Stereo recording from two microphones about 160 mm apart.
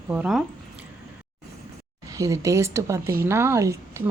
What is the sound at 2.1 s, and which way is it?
A woman's voice, 20° right (ahead or behind).